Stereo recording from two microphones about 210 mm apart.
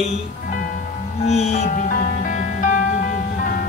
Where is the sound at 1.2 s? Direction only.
30° left (ahead or behind).